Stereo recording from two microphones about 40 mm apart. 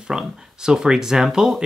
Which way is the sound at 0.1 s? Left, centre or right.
Centre.